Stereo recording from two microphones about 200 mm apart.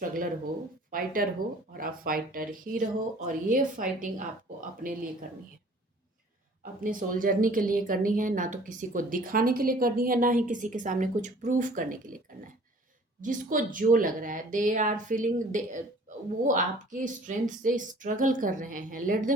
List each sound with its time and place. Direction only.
0.0 s a sound: 45° right (ahead or behind)
0.9 s a woman's voice: 45° right (ahead or behind)
6.8 s a woman's voice: 45° right (ahead or behind)
13.2 s speech: 40° right (ahead or behind)